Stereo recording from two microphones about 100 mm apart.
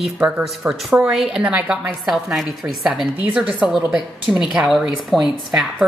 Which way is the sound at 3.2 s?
15° right (ahead or behind).